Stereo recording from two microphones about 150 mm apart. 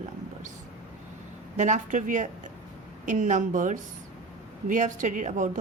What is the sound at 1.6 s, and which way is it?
Speech, 55° right (ahead or behind).